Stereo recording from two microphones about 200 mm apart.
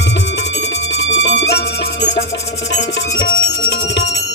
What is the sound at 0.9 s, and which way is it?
Music, 60° left (ahead or behind).